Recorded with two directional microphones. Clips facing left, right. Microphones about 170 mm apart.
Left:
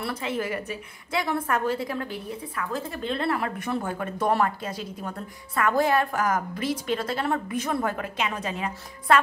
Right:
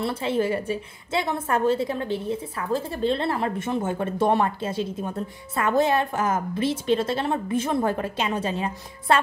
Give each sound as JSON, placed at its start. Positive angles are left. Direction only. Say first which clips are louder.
{"t": 0.0, "sound": "a woman's voice", "louder": "right 5 dB", "side_deg": -30}